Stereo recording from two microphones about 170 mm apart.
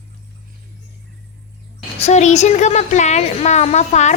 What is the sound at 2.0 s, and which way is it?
A woman's voice, 40° left (ahead or behind).